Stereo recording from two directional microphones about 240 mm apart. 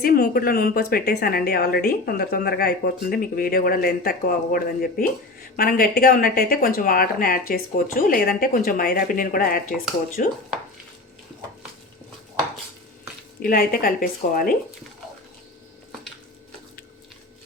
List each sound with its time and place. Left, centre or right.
0.0 s a woman's voice: left
13.4 s a woman's voice: left